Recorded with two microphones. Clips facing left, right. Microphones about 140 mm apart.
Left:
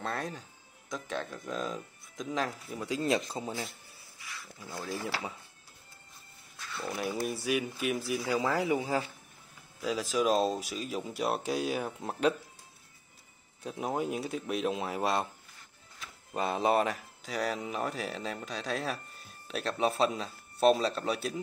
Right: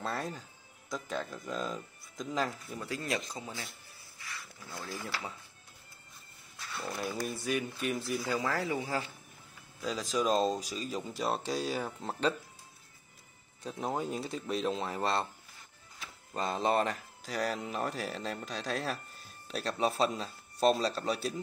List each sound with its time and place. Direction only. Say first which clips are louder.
0.0 s music: left 1 dB; centre (ahead or behind)
0.8 s speech: even; centre (ahead or behind)
3.0 s a man's voice: left 8 dB; 30° left (ahead or behind)
6.8 s speech: left 3 dB; 5° left (ahead or behind)
9.8 s speech: left 2 dB; 5° left (ahead or behind)
13.6 s speech: left 2 dB; 10° left (ahead or behind)
16.3 s speech: left 2 dB; 10° left (ahead or behind)